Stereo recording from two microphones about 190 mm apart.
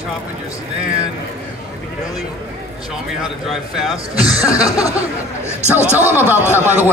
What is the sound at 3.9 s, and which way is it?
Speech, 30° right (ahead or behind).